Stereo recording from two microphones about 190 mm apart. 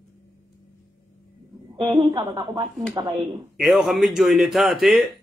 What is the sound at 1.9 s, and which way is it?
Speech, 25° right (ahead or behind).